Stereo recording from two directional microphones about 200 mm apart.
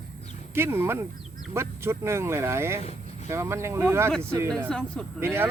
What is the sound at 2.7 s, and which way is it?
Vehicle, 30° left (ahead or behind).